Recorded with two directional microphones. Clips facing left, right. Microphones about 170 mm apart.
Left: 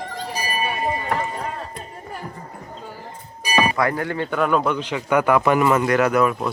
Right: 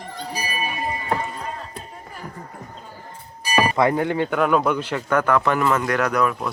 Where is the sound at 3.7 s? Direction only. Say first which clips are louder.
Right 3 dB; 20° right (ahead or behind).